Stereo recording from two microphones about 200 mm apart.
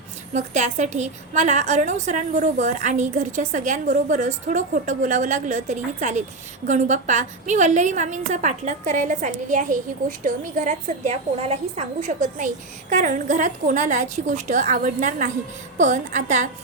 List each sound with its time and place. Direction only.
0.3 s a woman's voice: 35° right (ahead or behind)